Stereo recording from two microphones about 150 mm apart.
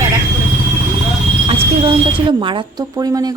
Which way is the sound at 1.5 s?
35° right (ahead or behind).